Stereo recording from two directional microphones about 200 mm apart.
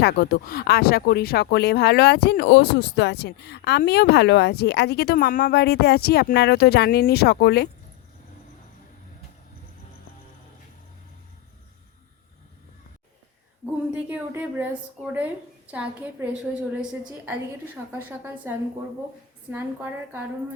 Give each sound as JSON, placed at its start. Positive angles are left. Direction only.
{"t": 0.0, "sound": "speech", "side_deg": 55}
{"t": 13.9, "sound": "a woman's voice", "side_deg": -5}